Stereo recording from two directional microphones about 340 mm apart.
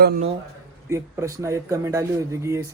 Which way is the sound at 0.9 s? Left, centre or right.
Centre.